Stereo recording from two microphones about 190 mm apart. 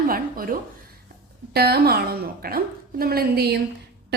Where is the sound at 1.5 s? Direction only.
55° right (ahead or behind).